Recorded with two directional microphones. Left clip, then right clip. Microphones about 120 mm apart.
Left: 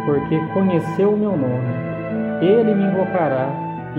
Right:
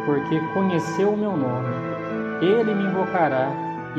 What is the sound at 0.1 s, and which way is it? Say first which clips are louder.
Speech: left 3 dB; 25° right (ahead or behind).